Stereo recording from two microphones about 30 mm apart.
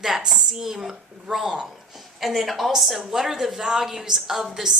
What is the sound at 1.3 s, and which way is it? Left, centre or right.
Speech, right.